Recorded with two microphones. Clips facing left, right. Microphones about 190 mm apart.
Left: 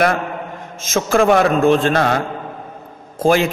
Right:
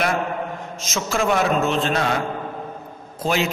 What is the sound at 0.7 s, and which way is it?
A man's voice, 55° left (ahead or behind).